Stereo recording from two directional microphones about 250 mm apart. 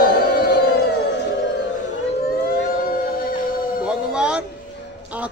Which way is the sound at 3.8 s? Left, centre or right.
Centre.